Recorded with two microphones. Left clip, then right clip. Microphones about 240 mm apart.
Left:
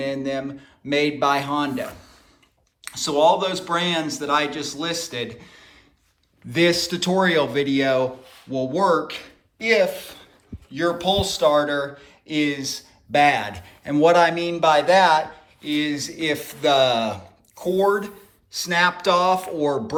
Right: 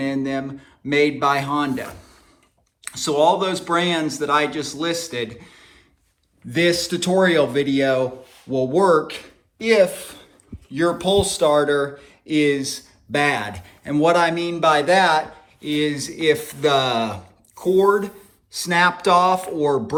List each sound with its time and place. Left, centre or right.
0.0 s a man's voice: centre